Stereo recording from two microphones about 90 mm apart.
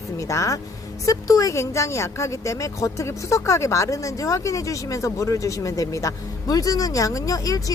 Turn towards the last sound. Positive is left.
turn(degrees=40)  # may be behind; listen again after turning